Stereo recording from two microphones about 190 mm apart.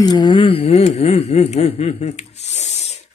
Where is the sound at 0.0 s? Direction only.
20° left (ahead or behind).